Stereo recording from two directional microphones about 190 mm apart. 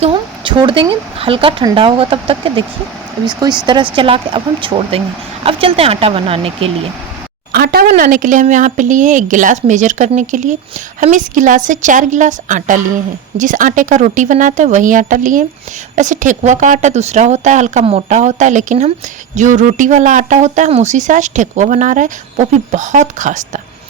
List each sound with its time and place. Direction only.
0.0 s speech: 25° right (ahead or behind)
3.9 s speech: 25° right (ahead or behind)
7.5 s speech: 55° right (ahead or behind)